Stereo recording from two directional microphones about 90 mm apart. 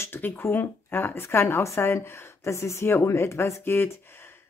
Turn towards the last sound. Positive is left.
turn(degrees=25)  # may be behind; listen again after turning